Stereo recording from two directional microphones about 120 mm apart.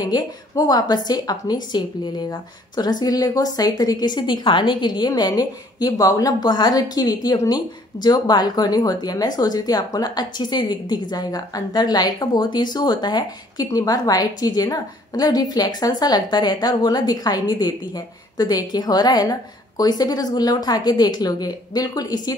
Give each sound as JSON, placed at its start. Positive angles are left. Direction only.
{"t": 0.0, "sound": "a woman's voice", "side_deg": 35}